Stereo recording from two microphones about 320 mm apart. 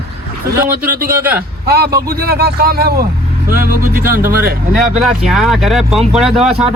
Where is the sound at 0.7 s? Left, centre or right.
Right.